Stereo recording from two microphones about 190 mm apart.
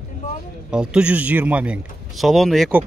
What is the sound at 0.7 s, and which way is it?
Speech, 5° right (ahead or behind).